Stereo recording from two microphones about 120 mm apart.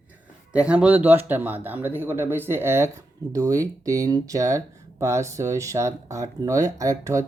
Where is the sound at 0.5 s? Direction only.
10° right (ahead or behind).